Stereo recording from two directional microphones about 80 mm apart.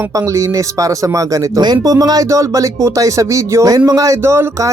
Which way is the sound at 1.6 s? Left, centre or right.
Right.